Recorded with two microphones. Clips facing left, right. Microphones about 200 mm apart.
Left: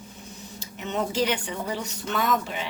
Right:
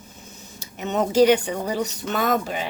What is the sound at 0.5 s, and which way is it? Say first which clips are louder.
Speech: right 5 dB; 45° right (ahead or behind).